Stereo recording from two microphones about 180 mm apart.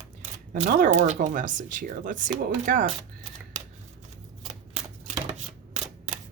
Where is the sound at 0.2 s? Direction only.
45° right (ahead or behind).